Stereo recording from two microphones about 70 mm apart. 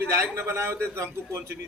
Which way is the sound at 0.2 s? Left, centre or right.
Right.